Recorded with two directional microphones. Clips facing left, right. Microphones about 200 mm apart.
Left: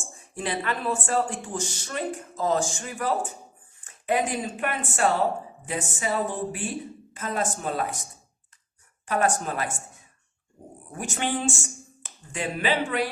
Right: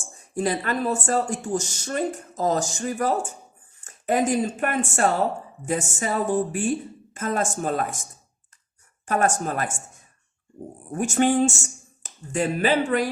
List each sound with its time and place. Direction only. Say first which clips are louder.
0.3 s a woman's voice: right 5 dB; 40° right (ahead or behind)
9.0 s a woman's voice: right 2 dB; 45° right (ahead or behind)
10.9 s a woman's voice: right 9 dB; 45° right (ahead or behind)